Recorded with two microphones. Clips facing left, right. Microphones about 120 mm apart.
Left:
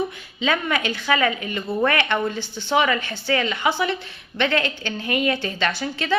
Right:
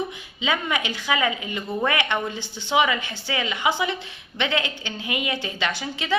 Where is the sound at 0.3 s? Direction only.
15° right (ahead or behind).